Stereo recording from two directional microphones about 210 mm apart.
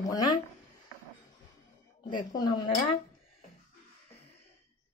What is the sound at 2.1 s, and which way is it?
Speech, 20° left (ahead or behind).